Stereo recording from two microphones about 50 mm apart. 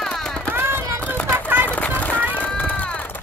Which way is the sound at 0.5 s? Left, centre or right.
Right.